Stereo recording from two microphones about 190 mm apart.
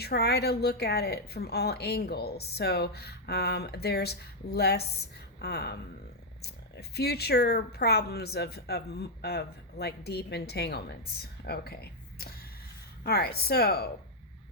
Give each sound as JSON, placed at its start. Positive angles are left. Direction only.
{"t": 0.0, "sound": "speech", "side_deg": 60}